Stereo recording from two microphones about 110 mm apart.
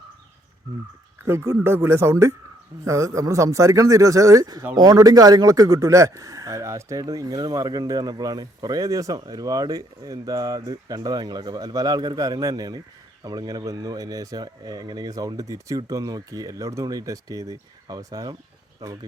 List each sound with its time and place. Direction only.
1.2 s speech: 25° right (ahead or behind)